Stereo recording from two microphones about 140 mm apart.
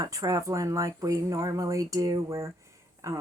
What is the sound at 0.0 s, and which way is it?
Speech, 25° right (ahead or behind).